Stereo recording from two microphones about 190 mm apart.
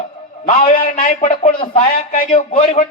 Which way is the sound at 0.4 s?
45° left (ahead or behind).